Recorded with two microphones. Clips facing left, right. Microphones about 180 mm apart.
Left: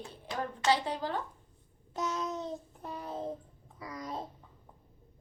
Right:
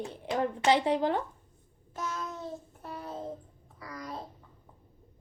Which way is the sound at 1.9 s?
20° left (ahead or behind).